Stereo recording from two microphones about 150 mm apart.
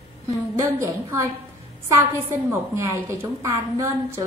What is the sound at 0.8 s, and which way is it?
A woman's voice, 20° right (ahead or behind).